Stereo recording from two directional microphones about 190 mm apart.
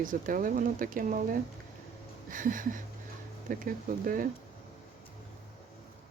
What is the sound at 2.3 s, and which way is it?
Speech, 45° right (ahead or behind).